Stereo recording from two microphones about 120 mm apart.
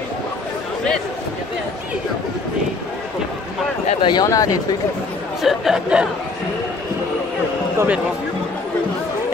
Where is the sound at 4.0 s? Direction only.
40° left (ahead or behind).